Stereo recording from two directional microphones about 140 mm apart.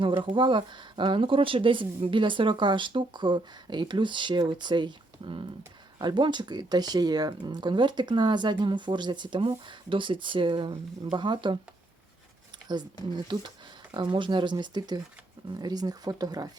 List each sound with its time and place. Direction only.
0.2 s speech: 35° right (ahead or behind)
13.1 s speech: 30° right (ahead or behind)